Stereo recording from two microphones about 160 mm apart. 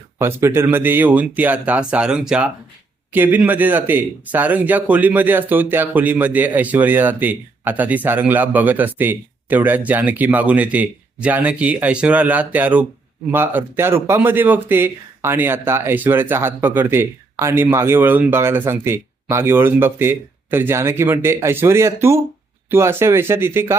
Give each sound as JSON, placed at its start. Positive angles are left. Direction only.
{"t": 0.2, "sound": "a man's voice", "side_deg": -15}